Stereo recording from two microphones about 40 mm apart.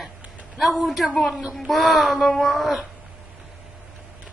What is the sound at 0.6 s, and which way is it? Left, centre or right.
Speech, centre.